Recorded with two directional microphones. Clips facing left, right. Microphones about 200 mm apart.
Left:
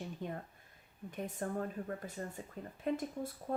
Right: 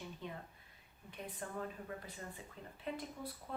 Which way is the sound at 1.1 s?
45° left (ahead or behind).